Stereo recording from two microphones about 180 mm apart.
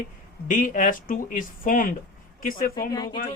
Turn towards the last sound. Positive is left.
turn(degrees=20)  # may be behind; listen again after turning